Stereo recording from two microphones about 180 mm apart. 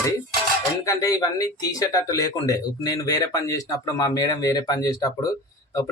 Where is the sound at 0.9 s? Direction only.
20° left (ahead or behind).